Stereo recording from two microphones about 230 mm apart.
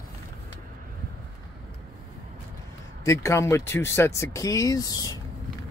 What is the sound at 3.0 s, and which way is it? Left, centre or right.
Speech, centre.